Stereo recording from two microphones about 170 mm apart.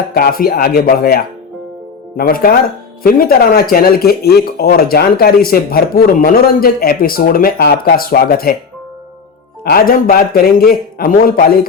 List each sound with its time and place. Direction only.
0.1 s speech: 60° left (ahead or behind)
9.6 s speech: 60° left (ahead or behind)